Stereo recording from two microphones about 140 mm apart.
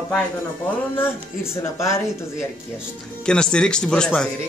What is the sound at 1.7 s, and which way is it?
Speech, 20° left (ahead or behind).